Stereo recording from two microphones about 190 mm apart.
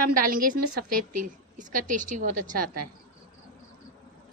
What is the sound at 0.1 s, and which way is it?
A woman's voice, 50° right (ahead or behind).